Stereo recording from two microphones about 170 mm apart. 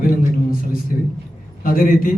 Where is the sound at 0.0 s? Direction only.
55° left (ahead or behind).